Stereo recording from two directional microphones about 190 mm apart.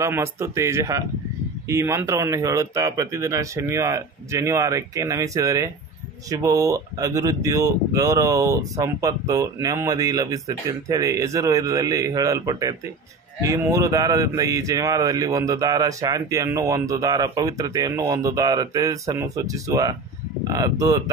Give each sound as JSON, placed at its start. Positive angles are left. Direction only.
{"t": 0.0, "sound": "speech", "side_deg": -15}